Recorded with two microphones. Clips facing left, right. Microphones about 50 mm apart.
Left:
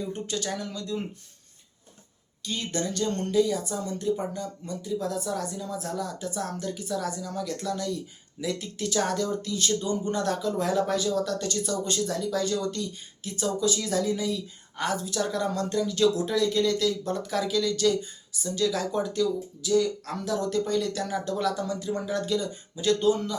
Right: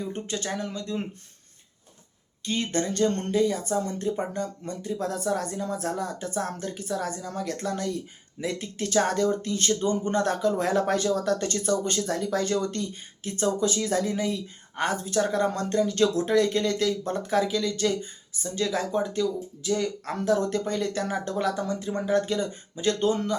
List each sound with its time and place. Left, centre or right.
0.0 s speech: right
2.4 s speech: right